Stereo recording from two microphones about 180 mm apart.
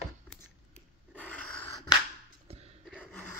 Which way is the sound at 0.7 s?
5° left (ahead or behind).